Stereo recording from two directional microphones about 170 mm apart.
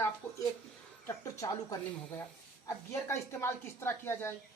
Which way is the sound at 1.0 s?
15° left (ahead or behind).